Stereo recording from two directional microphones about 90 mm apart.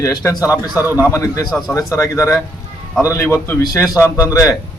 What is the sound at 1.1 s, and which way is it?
Speech, 35° left (ahead or behind).